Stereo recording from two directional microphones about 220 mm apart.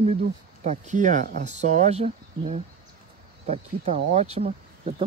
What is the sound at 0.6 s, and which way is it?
Speech, 35° right (ahead or behind).